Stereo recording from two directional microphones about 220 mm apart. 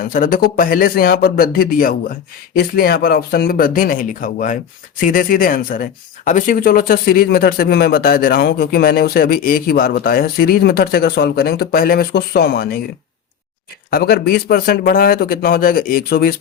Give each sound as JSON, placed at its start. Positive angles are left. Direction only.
{"t": 0.0, "sound": "speech", "side_deg": 40}
{"t": 13.9, "sound": "speech", "side_deg": 45}